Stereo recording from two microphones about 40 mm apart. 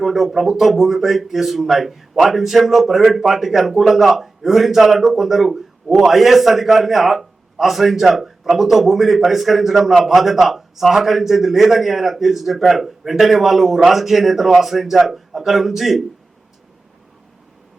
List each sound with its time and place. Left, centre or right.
0.0 s speech: centre